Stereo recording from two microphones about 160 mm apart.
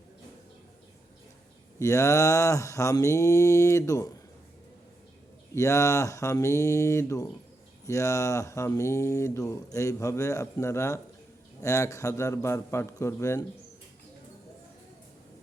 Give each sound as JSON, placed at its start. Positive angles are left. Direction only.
{"t": 1.8, "sound": "speech", "side_deg": 20}
{"t": 5.5, "sound": "a man's voice", "side_deg": 20}